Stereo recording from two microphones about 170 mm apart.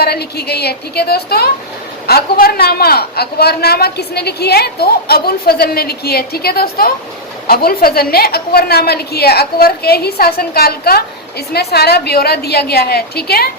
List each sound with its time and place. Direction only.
0.0 s a woman's voice: 70° left (ahead or behind)